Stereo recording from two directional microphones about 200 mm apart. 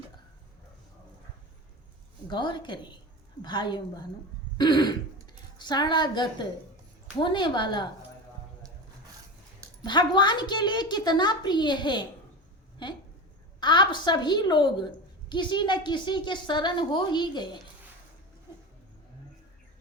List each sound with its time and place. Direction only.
2.2 s a woman's voice: 25° left (ahead or behind)
9.8 s a woman's voice: 20° left (ahead or behind)